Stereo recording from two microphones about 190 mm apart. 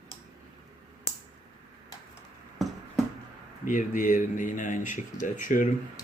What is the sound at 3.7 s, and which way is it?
A man's voice, 40° left (ahead or behind).